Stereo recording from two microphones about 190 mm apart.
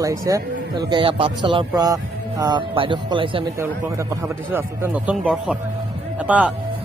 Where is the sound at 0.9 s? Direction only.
25° right (ahead or behind).